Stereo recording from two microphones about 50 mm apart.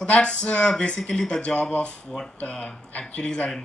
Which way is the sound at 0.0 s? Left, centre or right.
Left.